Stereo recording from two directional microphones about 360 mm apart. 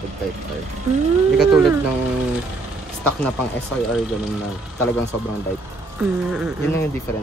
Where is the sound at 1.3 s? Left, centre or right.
Centre.